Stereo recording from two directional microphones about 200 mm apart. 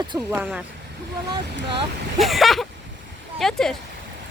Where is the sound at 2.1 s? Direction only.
Centre (ahead or behind).